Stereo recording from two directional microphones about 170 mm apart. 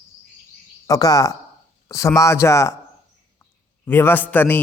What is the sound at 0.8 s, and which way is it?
A man's voice, 20° left (ahead or behind).